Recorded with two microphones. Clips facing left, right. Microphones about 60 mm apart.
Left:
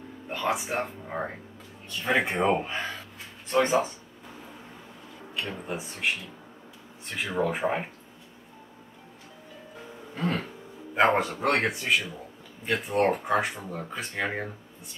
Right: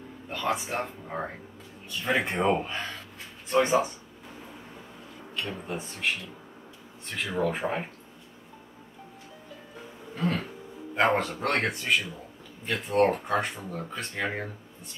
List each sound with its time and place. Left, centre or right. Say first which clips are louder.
0.3 s speech: left 1 dB; centre
5.3 s speech: left 1 dB; centre
7.1 s speech: left 1 dB; centre
10.1 s throat clearing: even; centre
11.0 s speech: left 2 dB; centre